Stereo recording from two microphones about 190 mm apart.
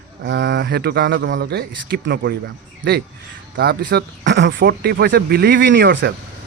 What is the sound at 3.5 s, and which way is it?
Speech, 55° right (ahead or behind).